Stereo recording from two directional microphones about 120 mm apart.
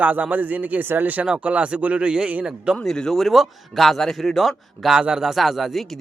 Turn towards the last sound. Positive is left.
turn(degrees=0)  # may be behind; listen again after turning